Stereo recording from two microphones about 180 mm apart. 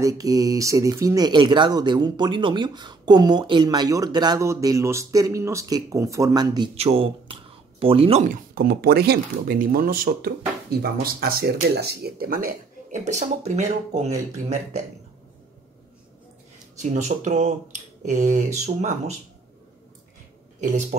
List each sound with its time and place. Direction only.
0.0 s speech: 20° right (ahead or behind)
6.8 s speech: 35° right (ahead or behind)
8.3 s speech: 55° right (ahead or behind); by 14.9 s 40° right (ahead or behind)
16.7 s speech: 40° right (ahead or behind)